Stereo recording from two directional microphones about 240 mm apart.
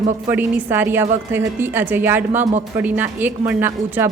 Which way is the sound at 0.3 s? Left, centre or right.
Centre.